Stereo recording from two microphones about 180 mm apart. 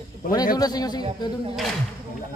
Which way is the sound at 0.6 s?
20° left (ahead or behind).